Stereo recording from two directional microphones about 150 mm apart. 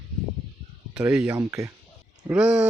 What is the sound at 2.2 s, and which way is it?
Speech, 10° right (ahead or behind).